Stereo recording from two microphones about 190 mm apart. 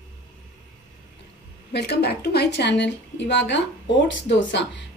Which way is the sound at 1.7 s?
60° left (ahead or behind).